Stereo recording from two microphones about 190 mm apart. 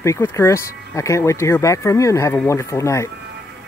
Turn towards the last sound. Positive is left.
turn(degrees=15)  # may be behind; listen again after turning